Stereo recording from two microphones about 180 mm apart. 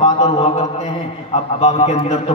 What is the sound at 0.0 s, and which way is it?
Mantra, 35° left (ahead or behind).